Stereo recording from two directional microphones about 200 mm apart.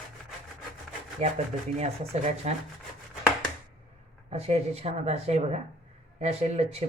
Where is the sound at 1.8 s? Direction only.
35° right (ahead or behind).